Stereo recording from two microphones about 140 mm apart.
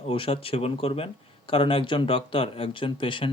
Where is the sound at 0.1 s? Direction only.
40° left (ahead or behind).